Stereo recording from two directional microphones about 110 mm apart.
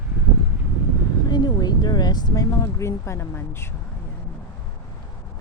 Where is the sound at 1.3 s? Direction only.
40° left (ahead or behind).